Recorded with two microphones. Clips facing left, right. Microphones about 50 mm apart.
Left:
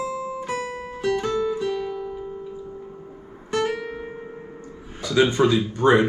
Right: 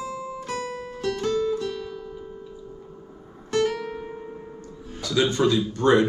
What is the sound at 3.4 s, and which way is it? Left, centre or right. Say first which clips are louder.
Guitar: right 1 dB; centre.